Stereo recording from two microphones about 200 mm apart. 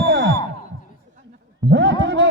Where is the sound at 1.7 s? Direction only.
60° right (ahead or behind).